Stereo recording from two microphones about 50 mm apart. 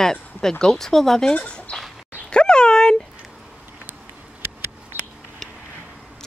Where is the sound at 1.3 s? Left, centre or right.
Left.